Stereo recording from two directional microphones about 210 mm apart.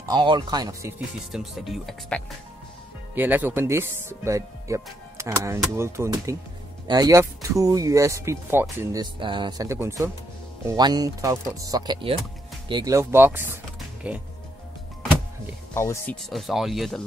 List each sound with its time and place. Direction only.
0.1 s speech: 20° right (ahead or behind)
1.3 s speech: centre (ahead or behind)
3.2 s speech: 10° right (ahead or behind)
9.0 s speech: 20° right (ahead or behind)
13.7 s music: 5° right (ahead or behind)
15.7 s speech: 10° left (ahead or behind)
16.3 s speech: centre (ahead or behind)